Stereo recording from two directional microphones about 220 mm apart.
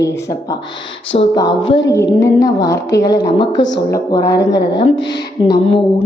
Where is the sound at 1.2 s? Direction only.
20° left (ahead or behind).